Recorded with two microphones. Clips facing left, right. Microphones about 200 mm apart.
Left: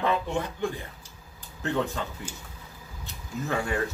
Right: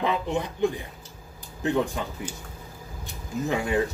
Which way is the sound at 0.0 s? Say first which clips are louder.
Right 1 dB; 15° right (ahead or behind).